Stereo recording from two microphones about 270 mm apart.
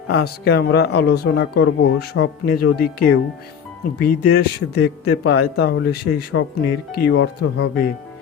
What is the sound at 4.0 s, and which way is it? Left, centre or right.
Speech, left.